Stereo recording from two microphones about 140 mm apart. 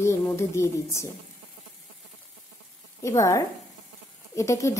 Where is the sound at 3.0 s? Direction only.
20° left (ahead or behind).